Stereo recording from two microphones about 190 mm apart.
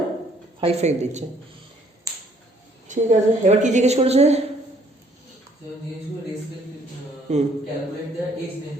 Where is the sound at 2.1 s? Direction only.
15° right (ahead or behind).